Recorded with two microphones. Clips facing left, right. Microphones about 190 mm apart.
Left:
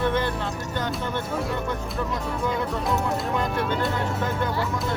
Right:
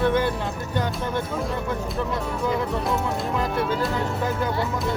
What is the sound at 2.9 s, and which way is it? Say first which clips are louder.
Speech: even; centre (ahead or behind).